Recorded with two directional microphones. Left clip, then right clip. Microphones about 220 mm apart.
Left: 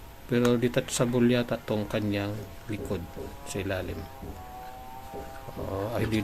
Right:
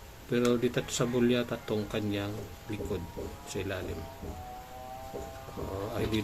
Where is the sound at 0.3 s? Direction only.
30° left (ahead or behind).